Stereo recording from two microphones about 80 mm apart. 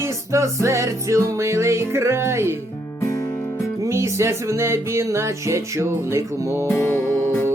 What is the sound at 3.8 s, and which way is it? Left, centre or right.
Music, right.